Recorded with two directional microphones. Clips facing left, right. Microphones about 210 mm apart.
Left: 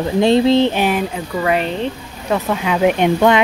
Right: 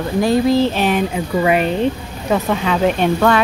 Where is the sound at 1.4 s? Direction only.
10° right (ahead or behind).